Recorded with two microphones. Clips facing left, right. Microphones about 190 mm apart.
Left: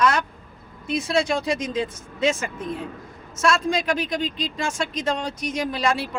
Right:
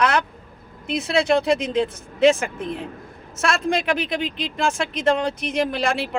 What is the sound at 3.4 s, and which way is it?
A man's voice, 60° right (ahead or behind).